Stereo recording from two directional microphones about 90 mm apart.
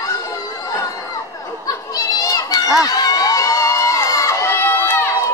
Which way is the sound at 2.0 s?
40° left (ahead or behind).